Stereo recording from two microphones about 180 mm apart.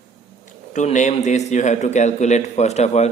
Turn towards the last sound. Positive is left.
turn(degrees=40)  # may be behind; listen again after turning